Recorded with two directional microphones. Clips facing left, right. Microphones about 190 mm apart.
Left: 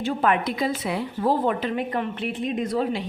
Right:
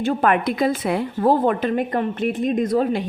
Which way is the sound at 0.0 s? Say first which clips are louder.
Right 4 dB; 55° right (ahead or behind).